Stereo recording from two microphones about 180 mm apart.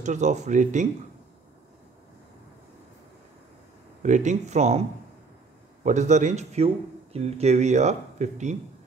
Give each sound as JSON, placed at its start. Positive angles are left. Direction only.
{"t": 0.0, "sound": "speech", "side_deg": -40}
{"t": 4.0, "sound": "a man's voice", "side_deg": -40}
{"t": 5.9, "sound": "a man's voice", "side_deg": -40}